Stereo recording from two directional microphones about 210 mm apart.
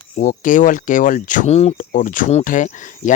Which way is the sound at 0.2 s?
40° left (ahead or behind).